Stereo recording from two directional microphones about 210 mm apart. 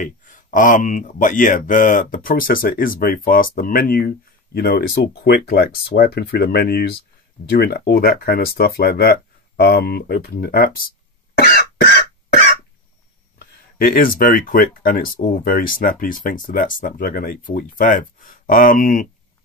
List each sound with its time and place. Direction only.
0.0 s speech: 40° left (ahead or behind)
11.3 s cough: 45° left (ahead or behind)
13.4 s speech: 45° left (ahead or behind)